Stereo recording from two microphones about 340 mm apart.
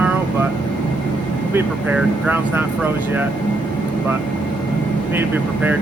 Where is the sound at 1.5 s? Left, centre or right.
Centre.